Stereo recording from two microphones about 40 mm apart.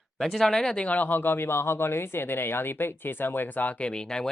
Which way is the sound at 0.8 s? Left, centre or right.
Left.